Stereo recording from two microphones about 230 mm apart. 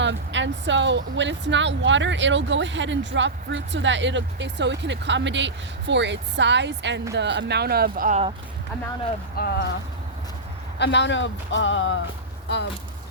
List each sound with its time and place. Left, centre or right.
0.0 s speech: right
9.4 s speech: left
10.8 s speech: left